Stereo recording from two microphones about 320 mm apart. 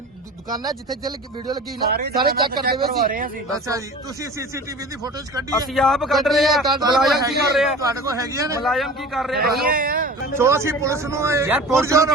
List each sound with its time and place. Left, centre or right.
0.5 s a man's voice: centre
1.9 s speech: right
3.7 s a man's voice: centre
5.7 s a man's voice: centre
7.8 s a man's voice: centre
9.6 s speech: right
10.3 s a man's voice: centre